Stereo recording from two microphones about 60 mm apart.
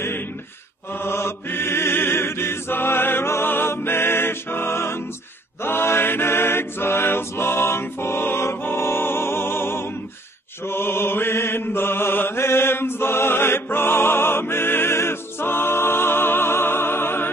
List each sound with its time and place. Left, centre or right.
0.9 s chant: left
10.6 s mantra: left